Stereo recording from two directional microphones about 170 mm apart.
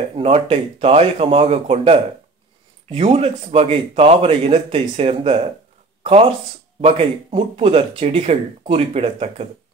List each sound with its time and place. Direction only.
0.1 s speech: 35° right (ahead or behind)